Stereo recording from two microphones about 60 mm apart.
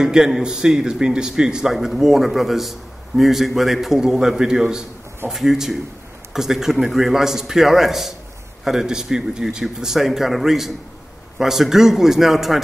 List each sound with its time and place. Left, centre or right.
0.0 s a man's voice: centre